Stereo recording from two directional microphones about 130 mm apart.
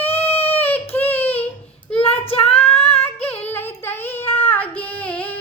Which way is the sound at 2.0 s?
45° left (ahead or behind).